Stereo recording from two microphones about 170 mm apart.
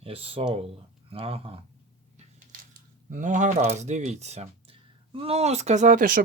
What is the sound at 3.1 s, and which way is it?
Speech, 50° right (ahead or behind).